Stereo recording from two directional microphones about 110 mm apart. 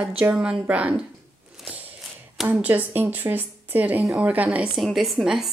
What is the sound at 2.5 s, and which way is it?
A woman's voice, 15° right (ahead or behind).